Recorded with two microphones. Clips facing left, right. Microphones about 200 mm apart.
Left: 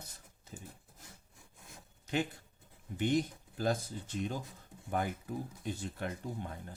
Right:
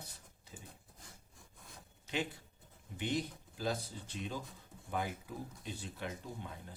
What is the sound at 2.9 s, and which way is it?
Speech, 50° left (ahead or behind).